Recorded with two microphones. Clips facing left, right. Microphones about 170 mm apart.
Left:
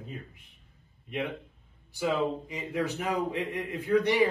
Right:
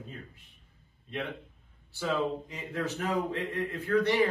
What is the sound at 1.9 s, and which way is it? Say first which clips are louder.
A man's voice: left 2 dB; 15° left (ahead or behind).